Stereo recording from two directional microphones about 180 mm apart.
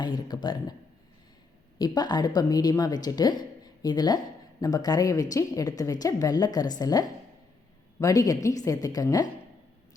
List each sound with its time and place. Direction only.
0.0 s speech: 25° left (ahead or behind)
1.8 s a woman's voice: 25° left (ahead or behind)